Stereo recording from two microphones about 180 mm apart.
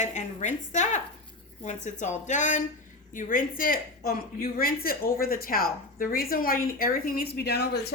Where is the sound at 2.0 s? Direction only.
40° left (ahead or behind).